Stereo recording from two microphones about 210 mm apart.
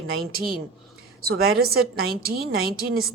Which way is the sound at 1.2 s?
45° right (ahead or behind).